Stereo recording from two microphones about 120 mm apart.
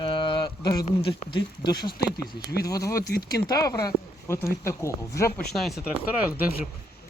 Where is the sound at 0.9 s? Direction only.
65° left (ahead or behind).